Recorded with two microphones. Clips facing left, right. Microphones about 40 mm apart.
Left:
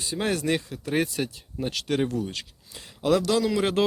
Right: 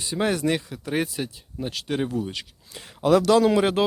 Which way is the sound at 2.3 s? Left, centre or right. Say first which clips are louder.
Right 2 dB; right.